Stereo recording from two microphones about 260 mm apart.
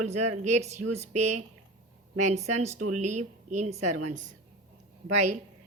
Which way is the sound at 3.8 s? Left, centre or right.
Right.